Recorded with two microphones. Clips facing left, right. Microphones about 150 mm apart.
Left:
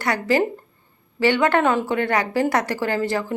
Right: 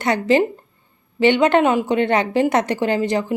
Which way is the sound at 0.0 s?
20° right (ahead or behind).